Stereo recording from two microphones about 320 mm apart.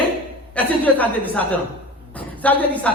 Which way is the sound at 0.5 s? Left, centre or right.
Centre.